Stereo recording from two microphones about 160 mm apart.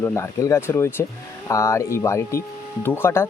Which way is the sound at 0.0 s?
15° left (ahead or behind).